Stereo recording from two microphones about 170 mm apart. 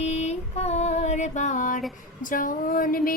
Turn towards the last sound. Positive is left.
turn(degrees=55)  # may be behind; listen again after turning